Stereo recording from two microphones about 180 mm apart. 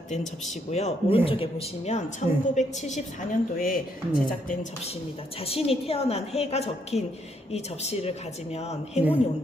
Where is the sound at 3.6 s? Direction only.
50° left (ahead or behind).